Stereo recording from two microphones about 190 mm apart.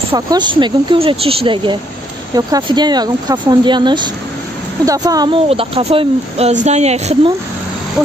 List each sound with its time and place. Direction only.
0.1 s speech: 25° right (ahead or behind)